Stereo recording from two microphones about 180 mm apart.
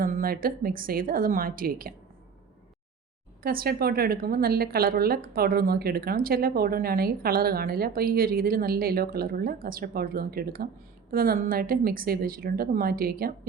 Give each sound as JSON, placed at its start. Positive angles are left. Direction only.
{"t": 0.0, "sound": "a woman's voice", "side_deg": -50}
{"t": 3.4, "sound": "a woman's voice", "side_deg": -55}